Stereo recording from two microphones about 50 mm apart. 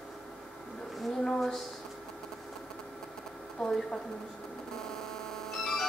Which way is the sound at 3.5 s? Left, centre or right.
Centre.